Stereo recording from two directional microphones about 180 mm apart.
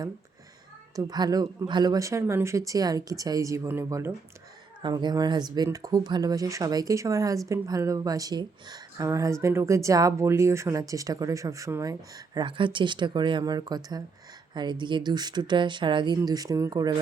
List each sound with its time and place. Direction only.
0.9 s a woman's voice: 20° right (ahead or behind)